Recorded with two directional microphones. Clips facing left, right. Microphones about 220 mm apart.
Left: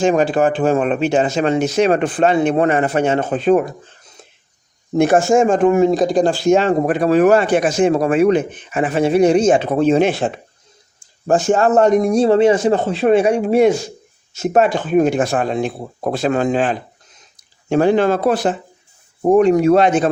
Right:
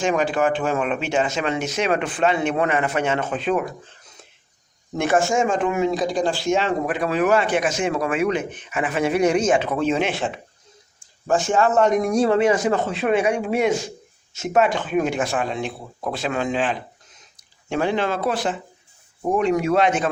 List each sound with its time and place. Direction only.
0.0 s speech: 35° left (ahead or behind)
4.9 s speech: 35° left (ahead or behind)